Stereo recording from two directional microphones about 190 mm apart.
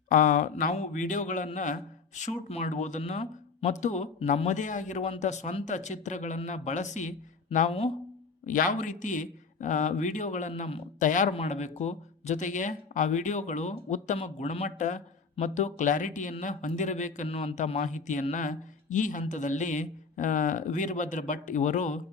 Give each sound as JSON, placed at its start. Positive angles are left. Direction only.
{"t": 0.1, "sound": "a man's voice", "side_deg": 45}